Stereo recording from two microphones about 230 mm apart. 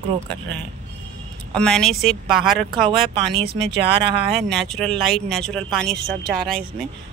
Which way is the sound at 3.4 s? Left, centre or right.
Right.